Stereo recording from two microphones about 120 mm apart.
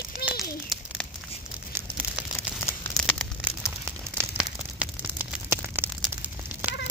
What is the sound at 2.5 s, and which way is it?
Crumpling, 20° left (ahead or behind).